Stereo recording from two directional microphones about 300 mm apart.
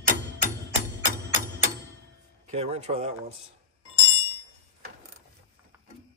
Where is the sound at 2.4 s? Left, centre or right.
Right.